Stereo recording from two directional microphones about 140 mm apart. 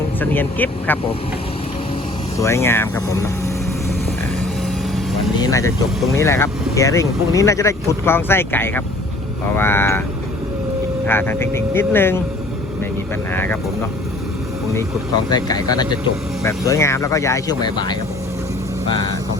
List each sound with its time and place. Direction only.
0.2 s speech: 15° left (ahead or behind)
2.4 s speech: 20° left (ahead or behind)
5.4 s speech: 25° left (ahead or behind)
11.0 s speech: 15° left (ahead or behind)
13.3 s speech: 15° left (ahead or behind)
15.3 s speech: 30° left (ahead or behind)